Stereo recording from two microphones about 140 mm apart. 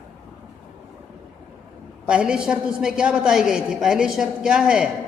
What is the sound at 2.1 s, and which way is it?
A woman's voice, 5° right (ahead or behind).